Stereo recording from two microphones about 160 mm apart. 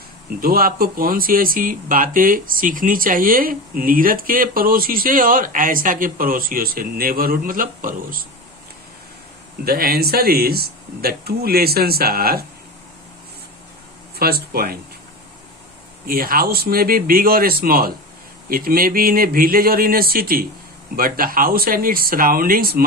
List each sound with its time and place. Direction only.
0.3 s speech: 65° right (ahead or behind)
9.6 s speech: 70° right (ahead or behind)
14.2 s speech: 70° right (ahead or behind)
16.0 s speech: 65° right (ahead or behind)